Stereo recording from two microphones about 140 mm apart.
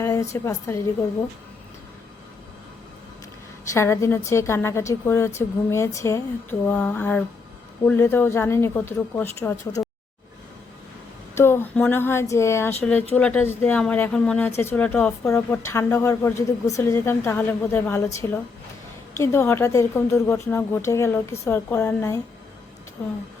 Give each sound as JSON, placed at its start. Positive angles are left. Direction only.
{"t": 0.0, "sound": "a woman's voice", "side_deg": 20}
{"t": 3.7, "sound": "a woman's voice", "side_deg": 20}
{"t": 11.3, "sound": "a woman's voice", "side_deg": 15}
{"t": 14.5, "sound": "a woman's voice", "side_deg": 15}